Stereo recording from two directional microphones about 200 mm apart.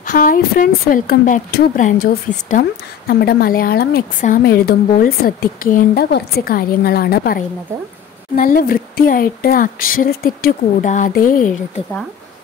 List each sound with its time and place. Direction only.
0.0 s a woman's voice: 45° left (ahead or behind)
3.1 s a woman's voice: 50° left (ahead or behind)